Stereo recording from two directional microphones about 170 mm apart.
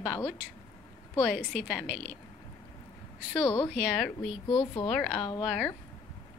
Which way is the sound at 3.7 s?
Centre (ahead or behind).